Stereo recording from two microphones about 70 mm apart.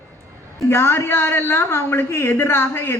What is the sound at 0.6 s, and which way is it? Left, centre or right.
A man's voice, left.